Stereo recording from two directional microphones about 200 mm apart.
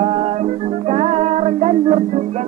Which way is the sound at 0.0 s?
35° right (ahead or behind).